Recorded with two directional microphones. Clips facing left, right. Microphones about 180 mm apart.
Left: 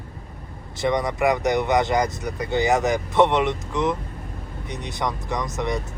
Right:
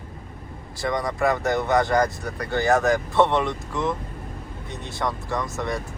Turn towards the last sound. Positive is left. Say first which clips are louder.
# left 1 dB
turn(degrees=20)  # may be behind; listen again after turning